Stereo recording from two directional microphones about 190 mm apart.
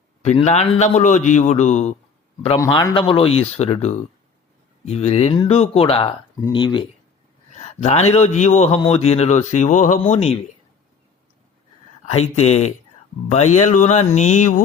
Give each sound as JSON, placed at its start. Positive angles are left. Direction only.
{"t": 0.2, "sound": "a man's voice", "side_deg": 35}
{"t": 2.9, "sound": "a man's voice", "side_deg": 30}
{"t": 7.5, "sound": "a sound", "side_deg": 35}
{"t": 8.1, "sound": "a man's voice", "side_deg": 35}
{"t": 12.2, "sound": "a man's voice", "side_deg": 35}